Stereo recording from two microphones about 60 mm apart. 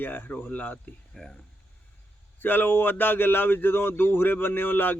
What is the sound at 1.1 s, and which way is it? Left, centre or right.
Speech, centre.